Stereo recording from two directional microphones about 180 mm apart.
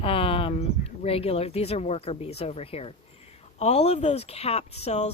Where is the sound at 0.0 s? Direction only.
30° left (ahead or behind).